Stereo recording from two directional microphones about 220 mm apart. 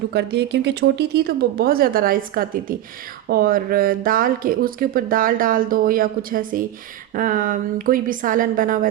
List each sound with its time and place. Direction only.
0.1 s speech: 50° right (ahead or behind)